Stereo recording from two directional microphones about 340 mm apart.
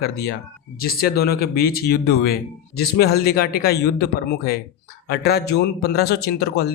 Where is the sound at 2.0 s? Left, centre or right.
Left.